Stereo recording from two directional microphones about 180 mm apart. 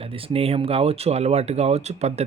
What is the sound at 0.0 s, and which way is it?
Speech, 30° right (ahead or behind).